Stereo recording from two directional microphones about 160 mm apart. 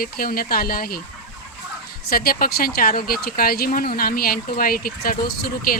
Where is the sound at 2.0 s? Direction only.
70° left (ahead or behind).